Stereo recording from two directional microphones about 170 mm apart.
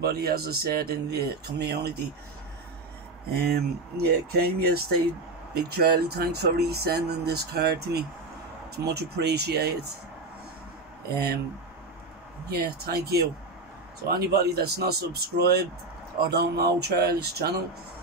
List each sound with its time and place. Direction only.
0.0 s speech: 65° right (ahead or behind)
3.3 s speech: 70° right (ahead or behind)
12.4 s speech: 70° right (ahead or behind)